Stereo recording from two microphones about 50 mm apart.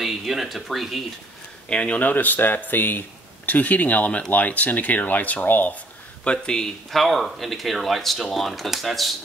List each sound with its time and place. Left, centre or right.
0.0 s speech: centre
1.7 s speech: left
2.0 s speech: left
6.2 s speech: centre
6.9 s speech: centre